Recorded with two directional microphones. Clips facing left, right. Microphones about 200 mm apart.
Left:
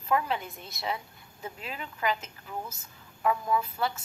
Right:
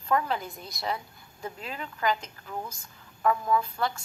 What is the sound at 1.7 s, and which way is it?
Speech, 35° right (ahead or behind).